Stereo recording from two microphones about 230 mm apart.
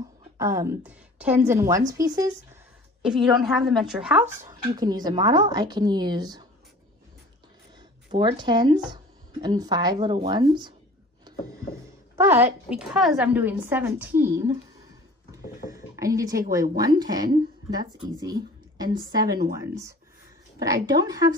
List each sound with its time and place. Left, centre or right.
0.4 s a woman's voice: centre
3.0 s a woman's voice: centre
8.1 s speech: centre
12.2 s a woman's voice: centre
15.6 s a sound: centre
16.7 s a woman's voice: centre